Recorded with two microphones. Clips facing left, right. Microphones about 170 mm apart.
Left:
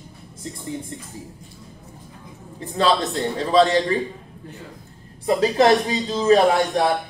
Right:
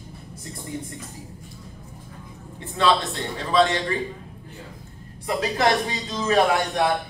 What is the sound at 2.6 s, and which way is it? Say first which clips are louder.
A man's voice: left 2 dB; 35° left (ahead or behind).